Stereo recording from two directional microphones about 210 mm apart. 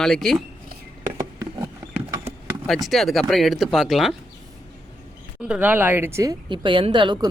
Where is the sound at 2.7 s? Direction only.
Centre (ahead or behind).